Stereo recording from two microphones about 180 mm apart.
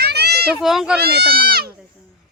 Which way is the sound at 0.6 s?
Centre (ahead or behind).